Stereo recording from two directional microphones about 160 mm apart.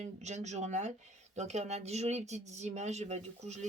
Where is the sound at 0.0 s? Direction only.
45° right (ahead or behind).